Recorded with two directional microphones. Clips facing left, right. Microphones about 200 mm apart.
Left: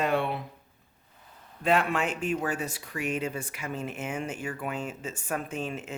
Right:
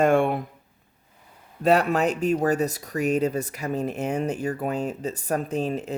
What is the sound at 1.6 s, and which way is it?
Speech, 40° right (ahead or behind).